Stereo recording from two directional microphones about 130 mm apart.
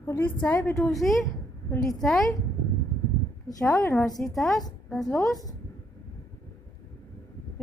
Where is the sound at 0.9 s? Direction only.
Centre (ahead or behind).